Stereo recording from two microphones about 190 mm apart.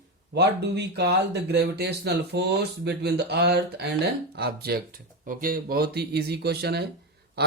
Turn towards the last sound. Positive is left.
turn(degrees=-55)  # may be behind; listen again after turning